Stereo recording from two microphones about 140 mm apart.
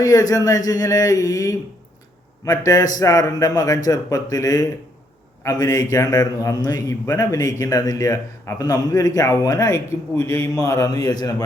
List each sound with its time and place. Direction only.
0.0 s a man's voice: 25° left (ahead or behind)